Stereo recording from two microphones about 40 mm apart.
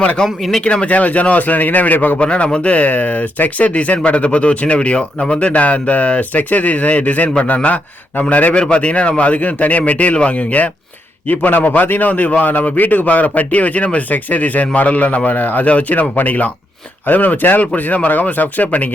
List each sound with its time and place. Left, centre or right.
0.6 s speech: left
2.1 s speech: left
3.7 s a man's voice: left
15.6 s a man's voice: left